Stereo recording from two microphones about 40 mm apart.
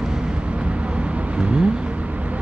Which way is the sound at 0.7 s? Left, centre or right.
Right.